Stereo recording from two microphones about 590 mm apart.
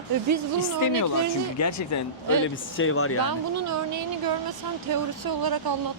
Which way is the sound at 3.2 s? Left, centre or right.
Right.